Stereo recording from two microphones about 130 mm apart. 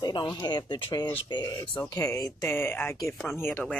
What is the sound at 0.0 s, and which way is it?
Speech, 35° left (ahead or behind).